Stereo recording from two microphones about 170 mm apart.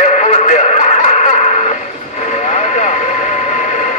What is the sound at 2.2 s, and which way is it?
Vehicle, 40° left (ahead or behind).